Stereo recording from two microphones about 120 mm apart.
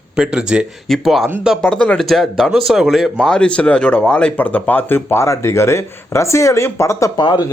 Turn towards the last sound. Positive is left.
turn(degrees=40)  # may be behind; listen again after turning